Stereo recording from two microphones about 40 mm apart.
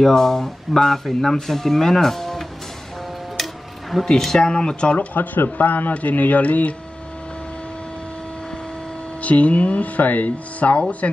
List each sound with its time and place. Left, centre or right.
0.0 s speech: centre
4.0 s speech: centre; by 5.0 s left
5.1 s speech: left
9.2 s speech: left